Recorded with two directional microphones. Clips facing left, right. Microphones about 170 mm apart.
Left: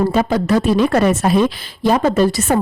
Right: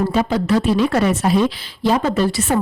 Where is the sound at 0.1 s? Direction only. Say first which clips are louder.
Left 2 dB; 45° left (ahead or behind).